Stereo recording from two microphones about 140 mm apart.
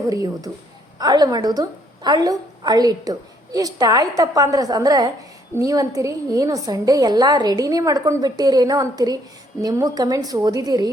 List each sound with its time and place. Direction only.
0.0 s a woman's voice: 25° right (ahead or behind)